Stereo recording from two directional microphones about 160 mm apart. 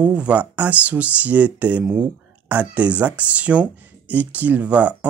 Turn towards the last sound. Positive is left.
turn(degrees=-10)  # may be behind; listen again after turning